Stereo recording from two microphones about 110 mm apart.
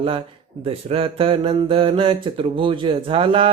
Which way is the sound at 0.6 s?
60° right (ahead or behind).